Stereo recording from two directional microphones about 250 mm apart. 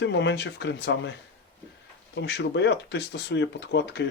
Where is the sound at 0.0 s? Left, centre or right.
Left.